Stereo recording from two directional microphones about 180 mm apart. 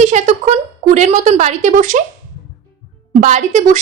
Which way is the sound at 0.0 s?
40° right (ahead or behind).